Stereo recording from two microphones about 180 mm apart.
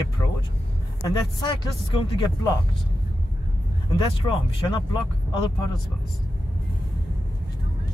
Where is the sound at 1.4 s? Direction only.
25° left (ahead or behind).